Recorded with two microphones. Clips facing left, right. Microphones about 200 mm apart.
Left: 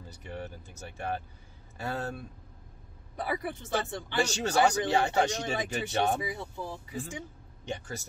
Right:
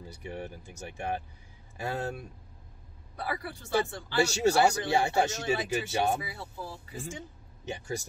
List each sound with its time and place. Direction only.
0.1 s speech: 10° right (ahead or behind)
3.2 s speech: 20° left (ahead or behind)
4.2 s speech: 10° right (ahead or behind)
6.2 s speech: 20° left (ahead or behind)
7.6 s speech: 10° right (ahead or behind)